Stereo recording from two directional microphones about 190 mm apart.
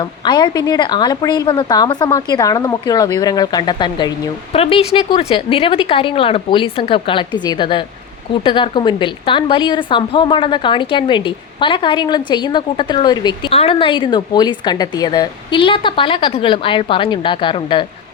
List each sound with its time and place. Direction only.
0.0 s a woman's voice: 25° left (ahead or behind)